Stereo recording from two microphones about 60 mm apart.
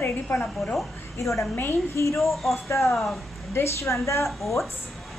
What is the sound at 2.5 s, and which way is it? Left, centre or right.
A woman's voice, left.